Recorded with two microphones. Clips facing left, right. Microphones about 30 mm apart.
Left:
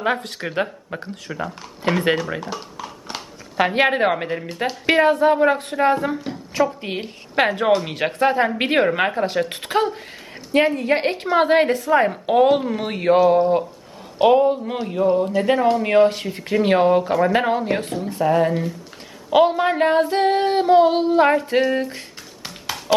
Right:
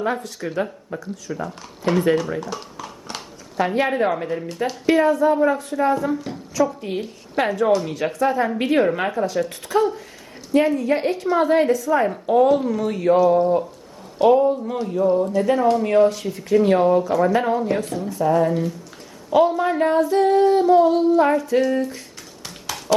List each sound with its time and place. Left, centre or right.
0.0 s speech: left
1.8 s speech: left
2.6 s a sound: centre
3.8 s female singing: left
4.4 s a woman's voice: left
4.9 s female singing: left
6.1 s a woman's voice: left
6.5 s female singing: left
14.2 s speech: left
15.8 s female singing: left
17.6 s speech: left
19.3 s female singing: left
21.6 s speech: left